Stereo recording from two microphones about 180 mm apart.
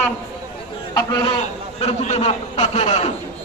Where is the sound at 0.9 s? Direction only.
25° left (ahead or behind).